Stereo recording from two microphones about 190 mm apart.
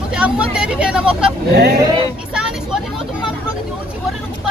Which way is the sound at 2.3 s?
5° right (ahead or behind).